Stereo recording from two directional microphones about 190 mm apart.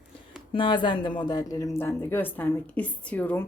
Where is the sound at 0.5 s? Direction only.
25° left (ahead or behind).